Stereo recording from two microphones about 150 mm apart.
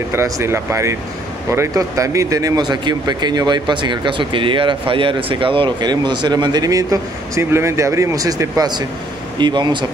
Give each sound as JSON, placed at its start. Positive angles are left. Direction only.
{"t": 0.1, "sound": "speech", "side_deg": -15}